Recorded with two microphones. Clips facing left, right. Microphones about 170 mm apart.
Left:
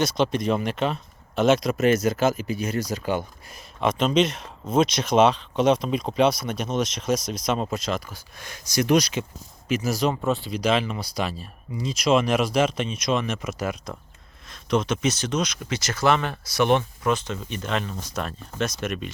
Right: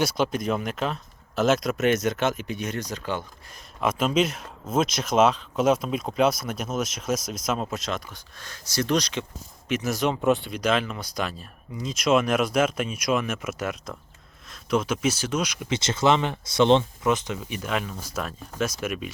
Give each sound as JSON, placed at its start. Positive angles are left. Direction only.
{"t": 0.0, "sound": "speech", "side_deg": -5}
{"t": 3.8, "sound": "speech", "side_deg": -5}
{"t": 8.4, "sound": "speech", "side_deg": 15}
{"t": 10.1, "sound": "speech", "side_deg": -15}
{"t": 10.3, "sound": "speech", "side_deg": 0}
{"t": 15.7, "sound": "speech", "side_deg": -25}